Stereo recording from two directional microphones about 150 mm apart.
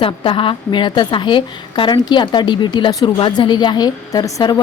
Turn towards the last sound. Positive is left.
turn(degrees=25)  # may be behind; listen again after turning